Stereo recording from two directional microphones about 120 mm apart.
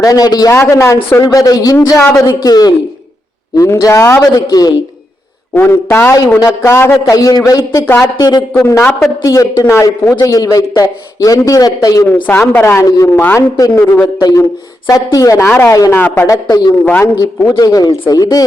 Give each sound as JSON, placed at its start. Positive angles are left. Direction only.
{"t": 0.0, "sound": "a man's voice", "side_deg": 30}
{"t": 5.5, "sound": "a man's voice", "side_deg": 20}
{"t": 8.6, "sound": "a man's voice", "side_deg": 20}
{"t": 12.0, "sound": "a man's voice", "side_deg": 15}
{"t": 14.2, "sound": "a man's voice", "side_deg": 30}
{"t": 15.4, "sound": "speech", "side_deg": 15}
{"t": 15.7, "sound": "a man's voice", "side_deg": 30}
{"t": 16.0, "sound": "speech", "side_deg": 15}
{"t": 16.2, "sound": "a man's voice", "side_deg": 30}
{"t": 16.8, "sound": "speech", "side_deg": 15}
{"t": 17.6, "sound": "a man's voice", "side_deg": 30}